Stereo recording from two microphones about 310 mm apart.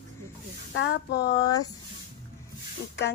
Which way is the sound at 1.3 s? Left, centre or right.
Centre.